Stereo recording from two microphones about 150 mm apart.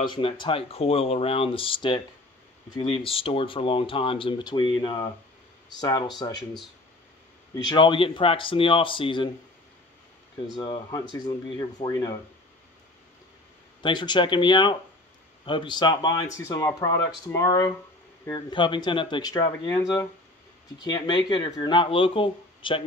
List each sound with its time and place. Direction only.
0.0 s speech: 30° left (ahead or behind)
10.5 s speech: 30° left (ahead or behind)
13.8 s speech: 30° left (ahead or behind)